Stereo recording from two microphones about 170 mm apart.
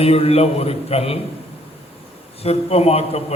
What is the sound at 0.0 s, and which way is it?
A man's voice, 35° left (ahead or behind).